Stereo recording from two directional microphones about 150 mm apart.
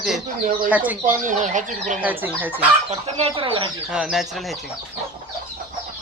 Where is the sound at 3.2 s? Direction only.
35° right (ahead or behind).